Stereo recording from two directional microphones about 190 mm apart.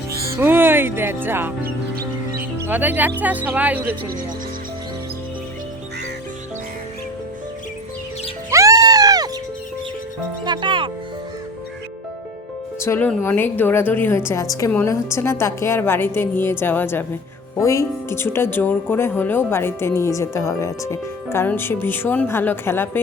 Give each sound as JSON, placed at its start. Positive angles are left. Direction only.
{"t": 0.3, "sound": "speech", "side_deg": -10}
{"t": 2.6, "sound": "speech", "side_deg": -10}
{"t": 8.4, "sound": "music", "side_deg": -15}
{"t": 10.4, "sound": "speech", "side_deg": -25}
{"t": 12.8, "sound": "speech", "side_deg": 10}